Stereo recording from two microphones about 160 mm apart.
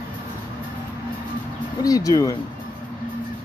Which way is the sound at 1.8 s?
20° left (ahead or behind).